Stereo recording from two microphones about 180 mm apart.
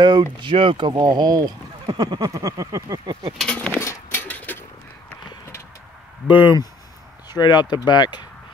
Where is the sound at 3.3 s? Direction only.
5° left (ahead or behind).